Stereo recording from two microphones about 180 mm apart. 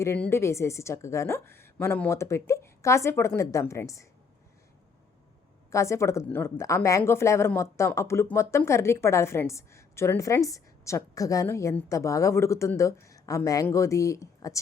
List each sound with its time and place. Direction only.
0.0 s a woman's voice: 15° left (ahead or behind)
5.7 s a woman's voice: 15° left (ahead or behind)